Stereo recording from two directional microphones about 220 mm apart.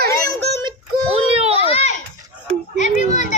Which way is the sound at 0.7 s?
25° right (ahead or behind).